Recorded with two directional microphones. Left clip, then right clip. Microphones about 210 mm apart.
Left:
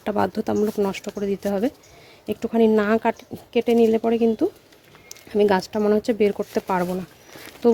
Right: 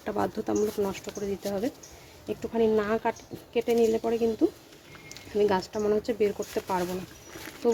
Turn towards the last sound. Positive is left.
turn(degrees=50)  # may be behind; listen again after turning